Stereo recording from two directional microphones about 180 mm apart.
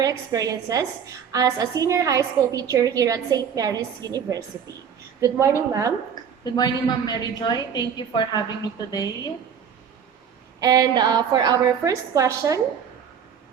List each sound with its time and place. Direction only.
0.0 s a woman's voice: 20° right (ahead or behind)
6.4 s a woman's voice: 25° left (ahead or behind)
10.6 s a woman's voice: 20° right (ahead or behind)